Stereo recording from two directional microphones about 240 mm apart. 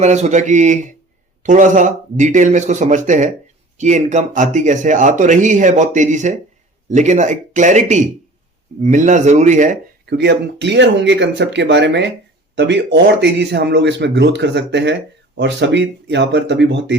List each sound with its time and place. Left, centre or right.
0.0 s speech: right